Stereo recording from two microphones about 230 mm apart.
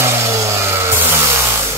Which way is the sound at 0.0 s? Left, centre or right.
Centre.